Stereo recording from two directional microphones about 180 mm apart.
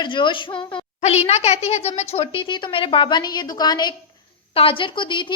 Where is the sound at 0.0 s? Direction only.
25° left (ahead or behind).